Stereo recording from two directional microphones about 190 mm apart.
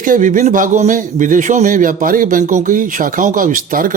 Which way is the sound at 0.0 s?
45° right (ahead or behind).